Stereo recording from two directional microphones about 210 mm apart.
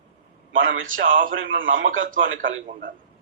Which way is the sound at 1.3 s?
65° right (ahead or behind).